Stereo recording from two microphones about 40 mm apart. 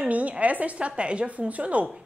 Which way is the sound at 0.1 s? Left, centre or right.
Right.